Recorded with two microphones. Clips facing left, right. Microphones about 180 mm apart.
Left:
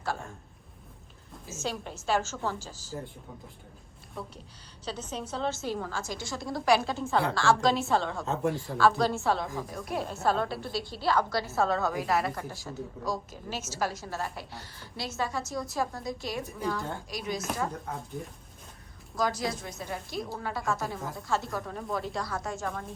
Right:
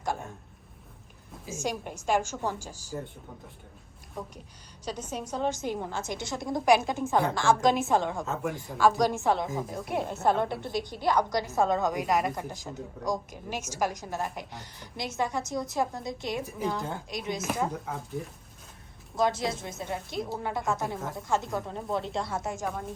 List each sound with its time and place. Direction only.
1.5 s a woman's voice: 15° right (ahead or behind)
4.9 s a woman's voice: 10° right (ahead or behind)
8.2 s speech: centre (ahead or behind)
9.0 s a woman's voice: 15° right (ahead or behind)
17.8 s speech: centre (ahead or behind)
19.1 s a woman's voice: 25° right (ahead or behind)
22.6 s a woman's voice: 10° right (ahead or behind)